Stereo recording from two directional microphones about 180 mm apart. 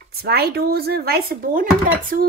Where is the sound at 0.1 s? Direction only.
60° right (ahead or behind).